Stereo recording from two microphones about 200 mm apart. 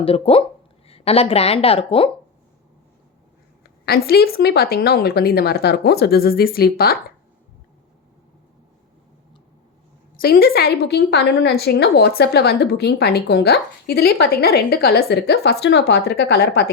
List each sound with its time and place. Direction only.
0.0 s a woman's voice: 30° left (ahead or behind)
3.6 s a woman's voice: 50° left (ahead or behind)
10.2 s a woman's voice: 45° left (ahead or behind)